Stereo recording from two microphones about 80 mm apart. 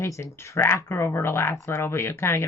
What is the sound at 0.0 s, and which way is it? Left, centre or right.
Speech, left.